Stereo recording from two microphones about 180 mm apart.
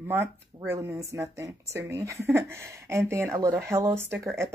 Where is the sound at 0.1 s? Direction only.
15° right (ahead or behind).